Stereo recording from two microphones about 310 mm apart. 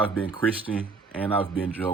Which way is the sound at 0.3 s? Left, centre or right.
Centre.